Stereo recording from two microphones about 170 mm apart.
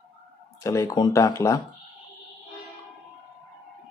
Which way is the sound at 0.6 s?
15° left (ahead or behind).